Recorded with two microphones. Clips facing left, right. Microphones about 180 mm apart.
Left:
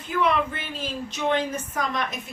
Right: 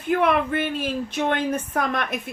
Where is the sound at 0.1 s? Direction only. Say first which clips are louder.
Right 4 dB; 60° right (ahead or behind).